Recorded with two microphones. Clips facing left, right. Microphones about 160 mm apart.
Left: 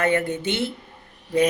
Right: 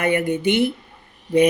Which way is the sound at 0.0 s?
15° right (ahead or behind).